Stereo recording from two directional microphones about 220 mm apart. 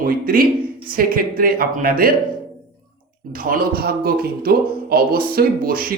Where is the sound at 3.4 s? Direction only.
40° right (ahead or behind).